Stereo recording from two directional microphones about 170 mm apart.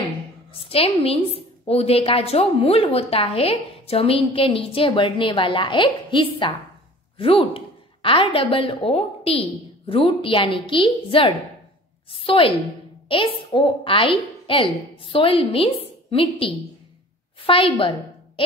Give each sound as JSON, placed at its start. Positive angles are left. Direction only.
{"t": 0.5, "sound": "a woman's voice", "side_deg": 35}